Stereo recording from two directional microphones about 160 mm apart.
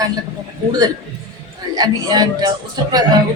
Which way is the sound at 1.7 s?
25° right (ahead or behind).